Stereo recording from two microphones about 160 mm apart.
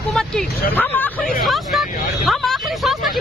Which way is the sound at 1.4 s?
Centre (ahead or behind).